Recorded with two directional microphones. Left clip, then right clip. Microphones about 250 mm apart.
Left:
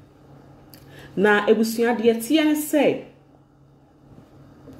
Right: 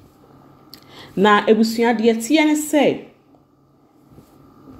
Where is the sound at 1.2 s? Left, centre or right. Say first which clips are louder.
Right 4 dB; centre.